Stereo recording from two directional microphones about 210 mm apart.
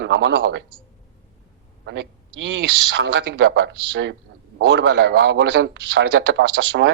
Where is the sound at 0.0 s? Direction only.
55° right (ahead or behind).